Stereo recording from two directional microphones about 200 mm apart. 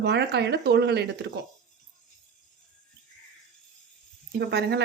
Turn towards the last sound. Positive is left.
turn(degrees=-55)  # may be behind; listen again after turning